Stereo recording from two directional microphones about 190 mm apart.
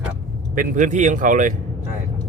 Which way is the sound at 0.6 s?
40° right (ahead or behind).